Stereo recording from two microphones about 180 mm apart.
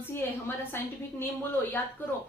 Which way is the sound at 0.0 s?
10° left (ahead or behind).